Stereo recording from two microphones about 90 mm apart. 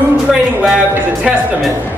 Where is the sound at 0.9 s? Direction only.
15° right (ahead or behind).